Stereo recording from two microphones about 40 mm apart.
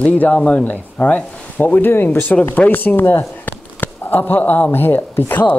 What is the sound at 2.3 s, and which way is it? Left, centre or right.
Speech, left.